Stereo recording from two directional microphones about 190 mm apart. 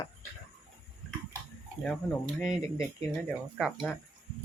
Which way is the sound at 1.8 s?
5° left (ahead or behind).